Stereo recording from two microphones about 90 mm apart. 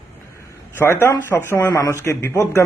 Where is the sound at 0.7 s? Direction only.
25° left (ahead or behind).